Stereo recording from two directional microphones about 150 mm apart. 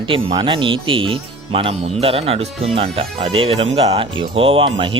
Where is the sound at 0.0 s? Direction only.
35° right (ahead or behind).